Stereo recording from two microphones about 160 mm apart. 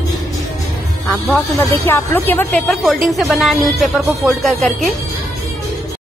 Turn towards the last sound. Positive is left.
turn(degrees=0)  # may be behind; listen again after turning